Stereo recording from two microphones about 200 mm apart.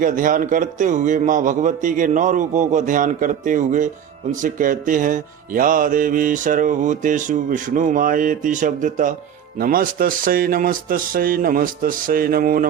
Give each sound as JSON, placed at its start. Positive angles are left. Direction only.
{"t": 0.0, "sound": "a man's voice", "side_deg": -40}